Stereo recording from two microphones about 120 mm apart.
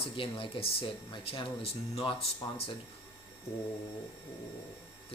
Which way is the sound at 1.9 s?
55° left (ahead or behind).